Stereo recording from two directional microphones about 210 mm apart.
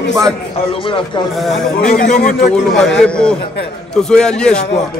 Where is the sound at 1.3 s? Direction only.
Centre (ahead or behind).